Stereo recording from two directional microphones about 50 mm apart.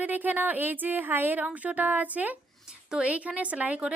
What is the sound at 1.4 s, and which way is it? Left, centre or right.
Speech, right.